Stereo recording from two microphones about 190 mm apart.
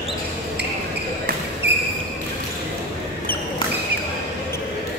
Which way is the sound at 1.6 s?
60° right (ahead or behind).